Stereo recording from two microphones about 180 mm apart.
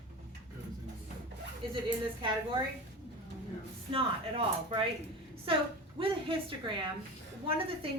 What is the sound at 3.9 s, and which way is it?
Speech, 30° right (ahead or behind).